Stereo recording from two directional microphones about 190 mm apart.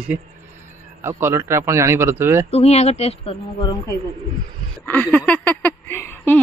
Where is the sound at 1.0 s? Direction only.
15° right (ahead or behind).